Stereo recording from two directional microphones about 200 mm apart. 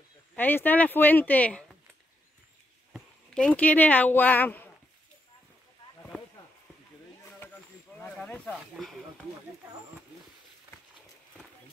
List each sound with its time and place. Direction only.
0.4 s speech: 10° left (ahead or behind)
2.9 s speech: 5° left (ahead or behind)
8.0 s snake: 5° left (ahead or behind)